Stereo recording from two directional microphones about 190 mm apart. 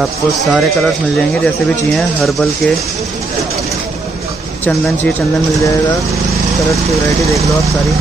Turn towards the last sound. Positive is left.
turn(degrees=0)  # may be behind; listen again after turning